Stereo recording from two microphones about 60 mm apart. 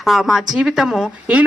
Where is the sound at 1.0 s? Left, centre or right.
Right.